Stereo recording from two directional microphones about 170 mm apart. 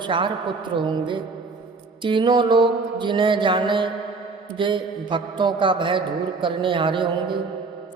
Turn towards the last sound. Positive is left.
turn(degrees=-30)  # may be behind; listen again after turning